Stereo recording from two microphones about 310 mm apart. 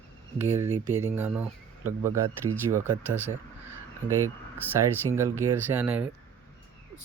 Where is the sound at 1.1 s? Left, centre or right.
Centre.